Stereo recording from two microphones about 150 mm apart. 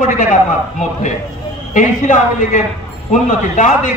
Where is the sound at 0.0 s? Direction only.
60° left (ahead or behind).